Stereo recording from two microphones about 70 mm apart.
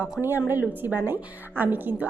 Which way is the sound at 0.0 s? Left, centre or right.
Right.